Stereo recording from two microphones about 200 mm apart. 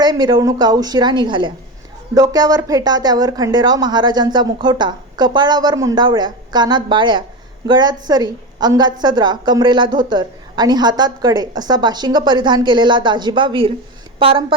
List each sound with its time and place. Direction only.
0.0 s a woman's voice: 20° right (ahead or behind)